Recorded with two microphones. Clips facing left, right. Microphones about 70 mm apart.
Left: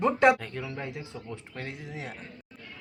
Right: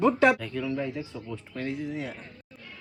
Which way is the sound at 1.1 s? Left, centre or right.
Left.